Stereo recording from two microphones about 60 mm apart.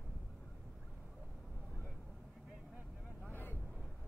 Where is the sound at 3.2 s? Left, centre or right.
Left.